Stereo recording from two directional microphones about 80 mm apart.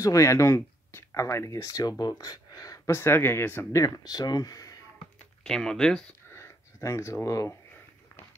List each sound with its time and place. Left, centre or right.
0.0 s speech: left
2.9 s speech: left
3.7 s speech: left
5.4 s speech: centre
6.3 s a sound: left